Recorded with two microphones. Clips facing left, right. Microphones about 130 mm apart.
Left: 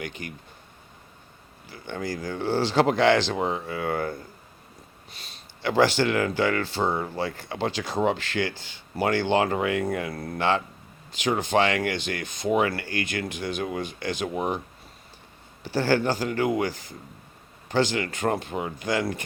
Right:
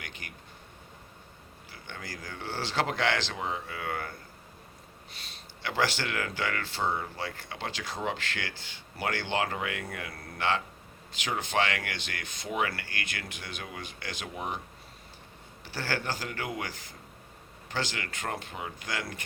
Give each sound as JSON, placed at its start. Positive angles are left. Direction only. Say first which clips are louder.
{"t": 1.9, "sound": "speech", "louder": "left 12 dB", "side_deg": 30}
{"t": 2.8, "sound": "speech", "louder": "left 9 dB", "side_deg": 25}
{"t": 3.2, "sound": "speech", "louder": "left 8 dB", "side_deg": 40}
{"t": 5.6, "sound": "speech", "louder": "left 9 dB", "side_deg": 35}
{"t": 11.9, "sound": "speech", "louder": "left 10 dB", "side_deg": 20}
{"t": 12.5, "sound": "speech", "louder": "left 5 dB", "side_deg": 35}
{"t": 15.7, "sound": "speech", "louder": "left 11 dB", "side_deg": 35}